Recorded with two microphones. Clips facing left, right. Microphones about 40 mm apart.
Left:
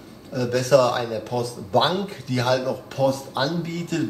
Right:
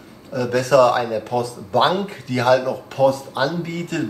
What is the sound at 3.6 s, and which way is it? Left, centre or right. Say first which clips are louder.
Speech: right 2 dB; centre.